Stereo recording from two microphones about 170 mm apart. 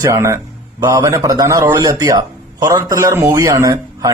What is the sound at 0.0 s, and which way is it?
A man's voice, 20° right (ahead or behind).